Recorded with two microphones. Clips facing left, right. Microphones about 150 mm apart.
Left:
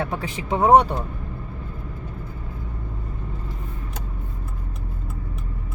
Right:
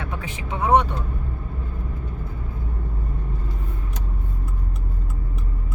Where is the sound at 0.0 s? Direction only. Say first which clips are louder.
Left 5 dB; 35° left (ahead or behind).